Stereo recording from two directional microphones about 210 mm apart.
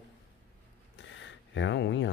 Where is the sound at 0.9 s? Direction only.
60° left (ahead or behind).